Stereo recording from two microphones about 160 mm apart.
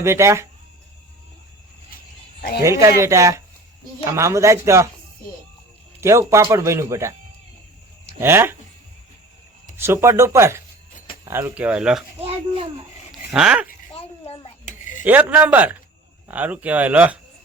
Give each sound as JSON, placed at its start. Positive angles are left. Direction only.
{"t": 0.0, "sound": "speech", "side_deg": -20}
{"t": 2.6, "sound": "speech", "side_deg": -20}
{"t": 6.0, "sound": "speech", "side_deg": -20}
{"t": 8.2, "sound": "speech", "side_deg": -15}
{"t": 9.7, "sound": "speech", "side_deg": -15}
{"t": 13.1, "sound": "a sound", "side_deg": -5}
{"t": 13.9, "sound": "a sound", "side_deg": 40}
{"t": 15.0, "sound": "speech", "side_deg": -10}